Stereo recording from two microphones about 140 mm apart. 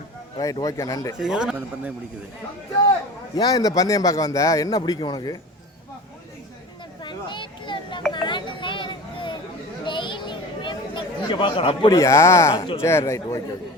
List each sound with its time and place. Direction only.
0.6 s a man's voice: 25° left (ahead or behind)
1.2 s a man's voice: 5° right (ahead or behind)
3.3 s a man's voice: 25° left (ahead or behind)
7.0 s a sound: 35° left (ahead or behind)
8.1 s children playing: 35° left (ahead or behind)
9.8 s chatter: 35° left (ahead or behind)
11.9 s a man's voice: 20° left (ahead or behind)